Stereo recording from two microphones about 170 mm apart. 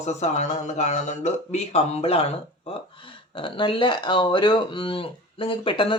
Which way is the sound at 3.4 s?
30° left (ahead or behind).